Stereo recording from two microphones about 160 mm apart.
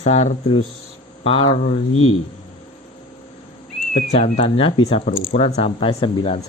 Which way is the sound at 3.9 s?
45° left (ahead or behind).